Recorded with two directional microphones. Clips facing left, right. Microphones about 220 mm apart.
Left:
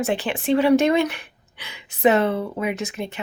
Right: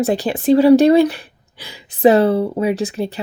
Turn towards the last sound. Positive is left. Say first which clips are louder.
# right 7 dB
turn(degrees=-35)  # may be behind; listen again after turning